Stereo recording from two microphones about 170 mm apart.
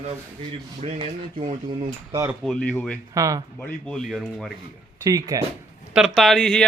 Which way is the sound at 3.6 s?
5° left (ahead or behind).